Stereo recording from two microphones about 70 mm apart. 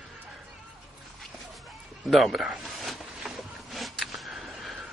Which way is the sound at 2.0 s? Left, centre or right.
Centre.